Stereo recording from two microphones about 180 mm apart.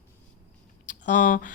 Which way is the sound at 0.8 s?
45° left (ahead or behind).